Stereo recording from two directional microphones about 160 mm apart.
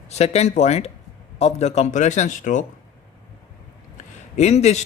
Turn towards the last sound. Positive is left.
turn(degrees=45)  # may be behind; listen again after turning